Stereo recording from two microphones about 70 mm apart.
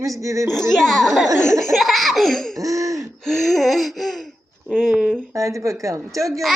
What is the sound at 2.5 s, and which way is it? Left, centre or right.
Speech, right.